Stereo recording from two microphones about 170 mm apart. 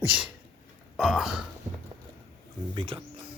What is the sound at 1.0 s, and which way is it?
Speech, centre (ahead or behind).